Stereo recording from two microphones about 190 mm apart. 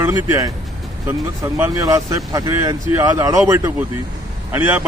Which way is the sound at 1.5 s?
15° right (ahead or behind).